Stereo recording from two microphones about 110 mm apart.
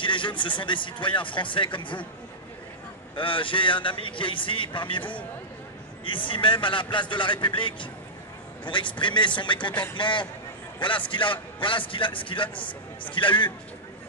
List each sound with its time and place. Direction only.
0.0 s speech: 45° left (ahead or behind)
3.2 s speech: 50° left (ahead or behind)